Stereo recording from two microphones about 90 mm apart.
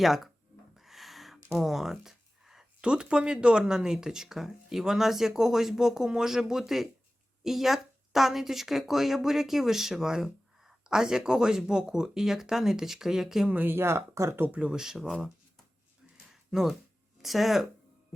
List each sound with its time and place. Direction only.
0.0 s speech: centre (ahead or behind)
0.8 s a sound: centre (ahead or behind)
1.5 s speech: 5° right (ahead or behind)
13.5 s speech: 20° right (ahead or behind)
14.6 s speech: 5° right (ahead or behind)
16.3 s a sound: 5° right (ahead or behind)
17.2 s speech: centre (ahead or behind)